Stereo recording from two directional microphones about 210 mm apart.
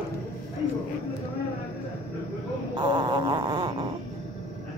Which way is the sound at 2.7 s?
20° right (ahead or behind).